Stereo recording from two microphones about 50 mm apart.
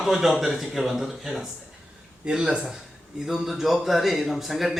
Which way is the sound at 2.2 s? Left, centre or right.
Centre.